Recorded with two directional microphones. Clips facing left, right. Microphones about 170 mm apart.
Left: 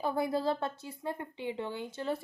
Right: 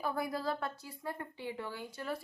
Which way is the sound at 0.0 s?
25° left (ahead or behind).